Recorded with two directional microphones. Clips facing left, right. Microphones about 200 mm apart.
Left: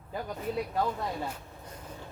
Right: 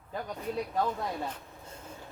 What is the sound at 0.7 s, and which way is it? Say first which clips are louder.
Speech: even; 5° left (ahead or behind).